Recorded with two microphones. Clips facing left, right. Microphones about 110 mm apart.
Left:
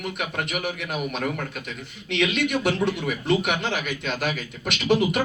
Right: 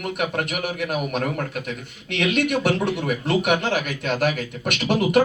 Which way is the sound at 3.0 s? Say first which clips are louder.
Right 1 dB; 45° right (ahead or behind).